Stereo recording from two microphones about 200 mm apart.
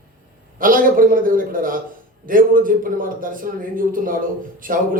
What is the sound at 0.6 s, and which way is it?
Speech, 45° right (ahead or behind).